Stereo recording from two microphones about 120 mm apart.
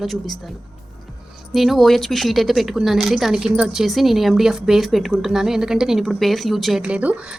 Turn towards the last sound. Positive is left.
turn(degrees=-10)  # may be behind; listen again after turning